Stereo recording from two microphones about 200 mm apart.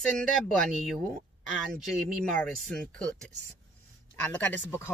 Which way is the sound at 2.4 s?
Centre (ahead or behind).